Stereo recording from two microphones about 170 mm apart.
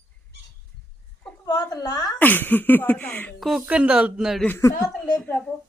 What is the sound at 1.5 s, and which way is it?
Speech, 20° left (ahead or behind).